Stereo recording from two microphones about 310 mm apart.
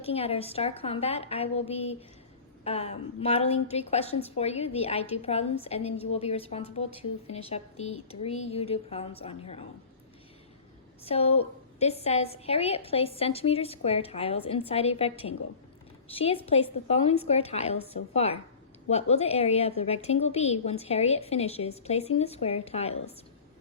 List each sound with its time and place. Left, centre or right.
0.0 s a woman's voice: centre
11.0 s a woman's voice: centre